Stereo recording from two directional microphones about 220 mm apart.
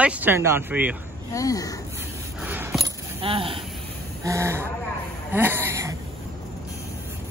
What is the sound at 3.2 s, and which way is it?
Speech, 25° right (ahead or behind).